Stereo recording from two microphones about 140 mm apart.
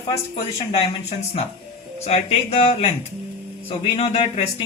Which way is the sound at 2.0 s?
50° left (ahead or behind).